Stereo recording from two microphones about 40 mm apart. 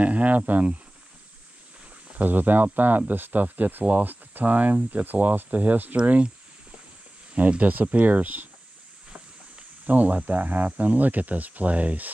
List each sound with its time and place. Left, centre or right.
0.0 s speech: right
2.1 s speech: right
7.3 s speech: right
9.8 s speech: right